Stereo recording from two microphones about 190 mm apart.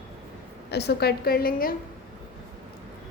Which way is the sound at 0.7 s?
60° left (ahead or behind).